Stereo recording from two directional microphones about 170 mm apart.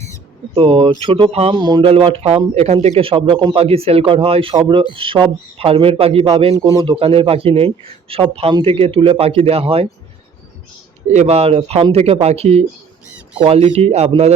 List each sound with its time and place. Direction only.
0.5 s speech: 30° right (ahead or behind)
6.6 s speech: 20° right (ahead or behind)
6.9 s speech: 35° right (ahead or behind)
11.1 s speech: 40° right (ahead or behind)